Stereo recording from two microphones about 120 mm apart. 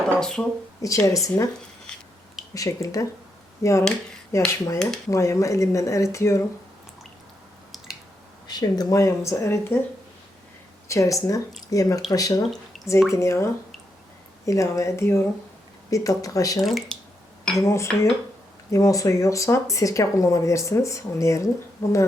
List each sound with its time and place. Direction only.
0.2 s speech: 5° left (ahead or behind)
0.8 s speech: 25° left (ahead or behind)
2.6 s speech: 30° left (ahead or behind)
4.8 s speech: 5° left (ahead or behind)
5.1 s speech: 25° left (ahead or behind)
8.4 s speech: 35° left (ahead or behind)
10.8 s speech: 25° left (ahead or behind)
12.7 s drip: centre (ahead or behind)
13.1 s speech: 25° left (ahead or behind)
16.6 s speech: centre (ahead or behind)
17.7 s speech: 25° left (ahead or behind)